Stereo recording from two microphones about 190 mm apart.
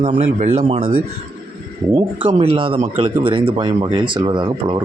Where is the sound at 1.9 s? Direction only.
30° right (ahead or behind).